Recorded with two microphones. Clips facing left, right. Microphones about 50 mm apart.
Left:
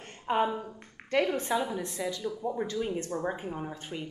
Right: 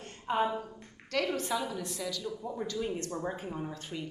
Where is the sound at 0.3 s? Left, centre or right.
Left.